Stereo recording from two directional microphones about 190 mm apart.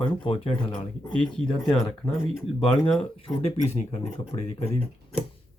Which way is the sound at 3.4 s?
35° left (ahead or behind).